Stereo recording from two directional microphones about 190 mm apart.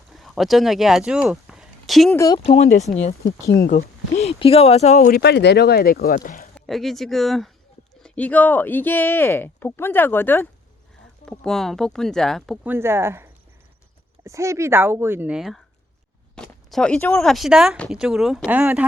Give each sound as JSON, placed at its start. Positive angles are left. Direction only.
{"t": 0.1, "sound": "speech", "side_deg": 0}
{"t": 2.1, "sound": "speech", "side_deg": 20}
{"t": 2.4, "sound": "speech", "side_deg": 35}
{"t": 3.2, "sound": "speech", "side_deg": 15}
{"t": 3.6, "sound": "speech", "side_deg": 50}
{"t": 4.1, "sound": "speech", "side_deg": 35}
{"t": 5.1, "sound": "speech", "side_deg": 60}
{"t": 6.5, "sound": "speech", "side_deg": 0}
{"t": 12.6, "sound": "speech", "side_deg": -10}